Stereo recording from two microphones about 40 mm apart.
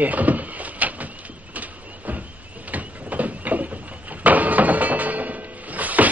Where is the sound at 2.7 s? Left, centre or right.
Right.